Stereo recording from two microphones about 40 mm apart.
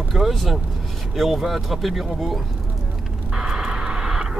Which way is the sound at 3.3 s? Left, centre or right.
Centre.